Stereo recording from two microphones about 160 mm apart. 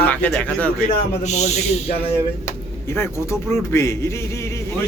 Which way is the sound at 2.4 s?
15° left (ahead or behind).